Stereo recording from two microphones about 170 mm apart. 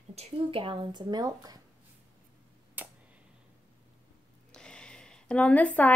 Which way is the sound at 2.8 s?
10° right (ahead or behind).